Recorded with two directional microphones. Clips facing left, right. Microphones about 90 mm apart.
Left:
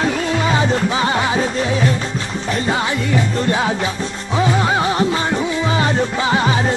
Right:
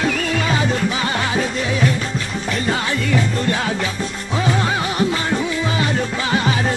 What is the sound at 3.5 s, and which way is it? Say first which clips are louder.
Music: left 3 dB; 25° left (ahead or behind).